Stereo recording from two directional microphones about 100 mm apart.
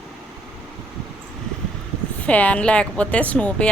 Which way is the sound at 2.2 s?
15° left (ahead or behind).